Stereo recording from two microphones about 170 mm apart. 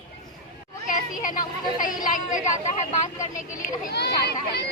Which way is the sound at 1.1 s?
50° left (ahead or behind).